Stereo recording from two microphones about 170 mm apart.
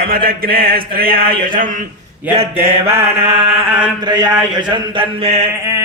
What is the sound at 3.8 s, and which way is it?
Mantra, 25° right (ahead or behind).